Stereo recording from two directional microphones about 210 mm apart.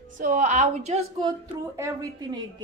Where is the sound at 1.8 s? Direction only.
15° right (ahead or behind).